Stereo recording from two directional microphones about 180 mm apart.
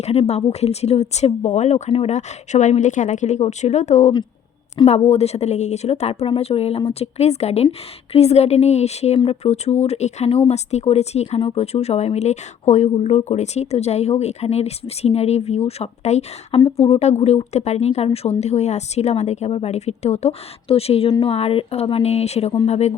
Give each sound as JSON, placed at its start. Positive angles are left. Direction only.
{"t": 0.0, "sound": "speech", "side_deg": 35}